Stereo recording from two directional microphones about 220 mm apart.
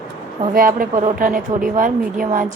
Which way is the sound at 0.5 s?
40° right (ahead or behind).